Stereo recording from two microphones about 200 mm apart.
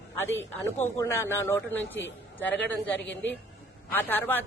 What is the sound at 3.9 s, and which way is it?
Speech, 10° left (ahead or behind).